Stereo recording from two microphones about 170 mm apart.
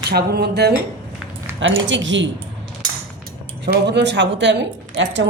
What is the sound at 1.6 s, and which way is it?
Speech, 90° right.